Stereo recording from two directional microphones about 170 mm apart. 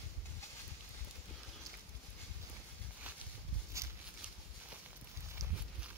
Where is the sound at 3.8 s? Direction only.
15° right (ahead or behind).